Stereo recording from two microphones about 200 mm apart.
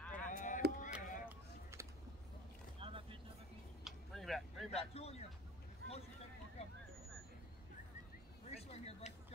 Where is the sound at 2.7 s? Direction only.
25° right (ahead or behind).